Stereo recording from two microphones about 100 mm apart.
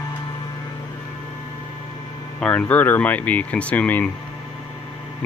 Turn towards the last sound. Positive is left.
turn(degrees=15)  # may be behind; listen again after turning